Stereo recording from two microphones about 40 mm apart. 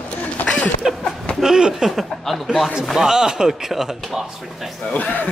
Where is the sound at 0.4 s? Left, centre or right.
Left.